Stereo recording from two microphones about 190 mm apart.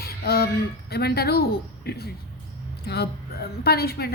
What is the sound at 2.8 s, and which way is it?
A woman's voice, 60° left (ahead or behind).